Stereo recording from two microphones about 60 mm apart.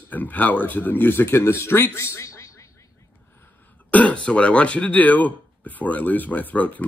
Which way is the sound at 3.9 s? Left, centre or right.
Left.